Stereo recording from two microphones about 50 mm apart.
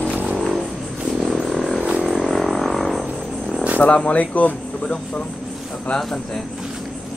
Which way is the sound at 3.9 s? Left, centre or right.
Left.